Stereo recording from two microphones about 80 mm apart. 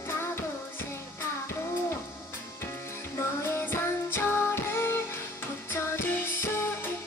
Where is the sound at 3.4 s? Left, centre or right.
Left.